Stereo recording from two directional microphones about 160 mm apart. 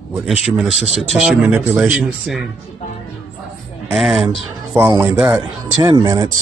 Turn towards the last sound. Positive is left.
turn(degrees=-25)  # may be behind; listen again after turning